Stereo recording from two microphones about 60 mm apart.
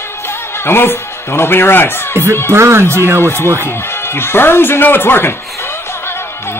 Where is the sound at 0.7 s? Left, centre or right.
Left.